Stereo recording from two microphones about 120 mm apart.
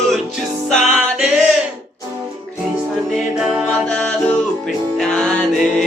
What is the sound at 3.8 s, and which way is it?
Music, 10° left (ahead or behind).